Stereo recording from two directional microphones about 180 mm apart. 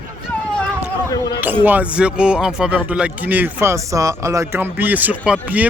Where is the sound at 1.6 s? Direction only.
10° right (ahead or behind).